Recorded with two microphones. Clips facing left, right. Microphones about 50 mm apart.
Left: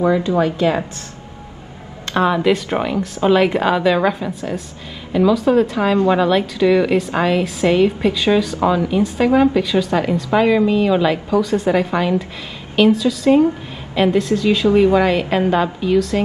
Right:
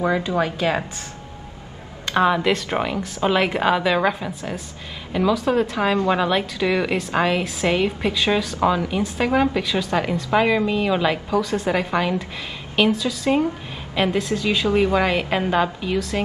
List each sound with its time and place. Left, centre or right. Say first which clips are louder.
0.0 s a woman's voice: left 5 dB; centre
2.2 s a woman's voice: left 4 dB; centre